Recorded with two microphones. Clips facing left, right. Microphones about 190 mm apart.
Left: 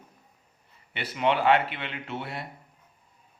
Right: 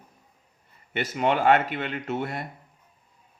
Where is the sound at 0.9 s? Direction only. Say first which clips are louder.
Right 2 dB; 45° right (ahead or behind).